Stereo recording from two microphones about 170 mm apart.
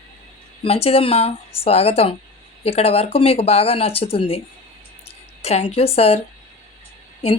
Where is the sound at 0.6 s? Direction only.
35° left (ahead or behind).